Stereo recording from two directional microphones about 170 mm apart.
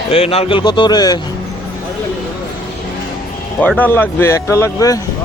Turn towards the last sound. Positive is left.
turn(degrees=20)  # may be behind; listen again after turning